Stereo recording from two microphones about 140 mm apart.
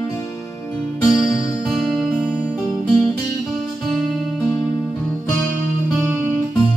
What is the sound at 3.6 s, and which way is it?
Music, 5° left (ahead or behind).